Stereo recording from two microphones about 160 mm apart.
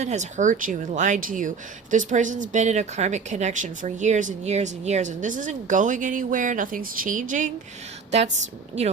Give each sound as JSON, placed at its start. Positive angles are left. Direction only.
{"t": 0.0, "sound": "speech", "side_deg": -45}
{"t": 8.8, "sound": "speech", "side_deg": -40}